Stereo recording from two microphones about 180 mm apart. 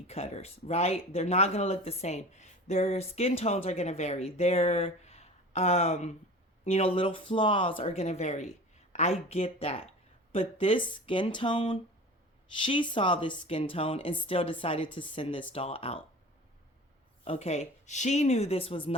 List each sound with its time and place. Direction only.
0.1 s speech: 35° left (ahead or behind)
17.2 s speech: 35° left (ahead or behind)